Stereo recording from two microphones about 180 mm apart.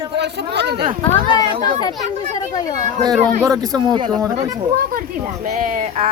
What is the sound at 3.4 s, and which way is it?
Speech, 20° right (ahead or behind).